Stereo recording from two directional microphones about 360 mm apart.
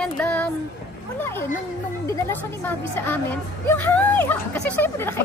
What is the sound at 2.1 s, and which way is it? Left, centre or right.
Speech, centre.